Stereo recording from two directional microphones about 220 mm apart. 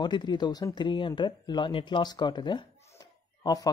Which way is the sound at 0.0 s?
20° left (ahead or behind).